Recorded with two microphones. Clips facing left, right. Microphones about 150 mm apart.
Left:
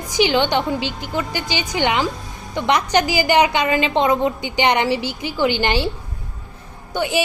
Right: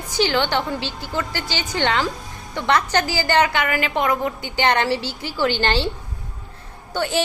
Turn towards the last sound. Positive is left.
turn(degrees=15)  # may be behind; listen again after turning